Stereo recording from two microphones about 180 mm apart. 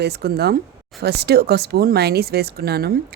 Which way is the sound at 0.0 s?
65° right (ahead or behind).